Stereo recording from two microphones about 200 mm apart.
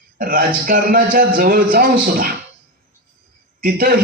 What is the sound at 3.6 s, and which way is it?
Speech, 50° right (ahead or behind).